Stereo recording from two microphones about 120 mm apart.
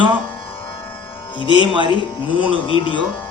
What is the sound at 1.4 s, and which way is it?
Speech, 45° left (ahead or behind).